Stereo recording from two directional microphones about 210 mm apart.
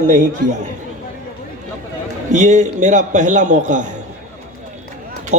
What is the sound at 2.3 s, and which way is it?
Speech, 35° right (ahead or behind).